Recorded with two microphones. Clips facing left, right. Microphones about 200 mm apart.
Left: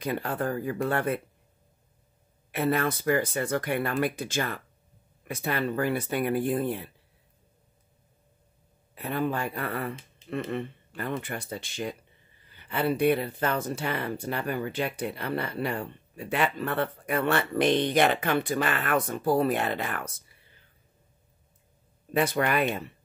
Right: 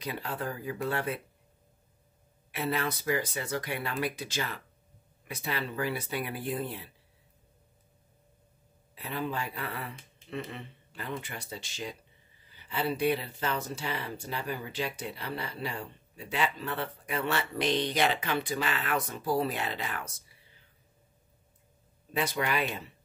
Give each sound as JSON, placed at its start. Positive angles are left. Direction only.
{"t": 0.0, "sound": "speech", "side_deg": 50}
{"t": 2.5, "sound": "speech", "side_deg": 50}
{"t": 8.9, "sound": "speech", "side_deg": 50}
{"t": 22.1, "sound": "speech", "side_deg": 55}